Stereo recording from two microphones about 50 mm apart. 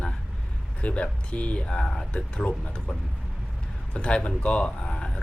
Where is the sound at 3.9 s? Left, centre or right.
Left.